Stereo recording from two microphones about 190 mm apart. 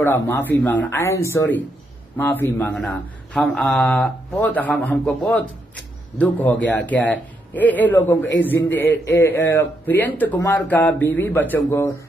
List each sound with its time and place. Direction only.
0.0 s a man's voice: 10° left (ahead or behind)